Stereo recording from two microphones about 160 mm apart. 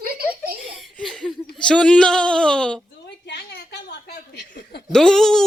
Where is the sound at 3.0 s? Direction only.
90° left.